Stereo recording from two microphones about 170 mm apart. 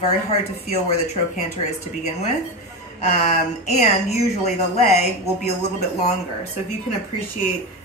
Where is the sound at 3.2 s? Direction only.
45° left (ahead or behind).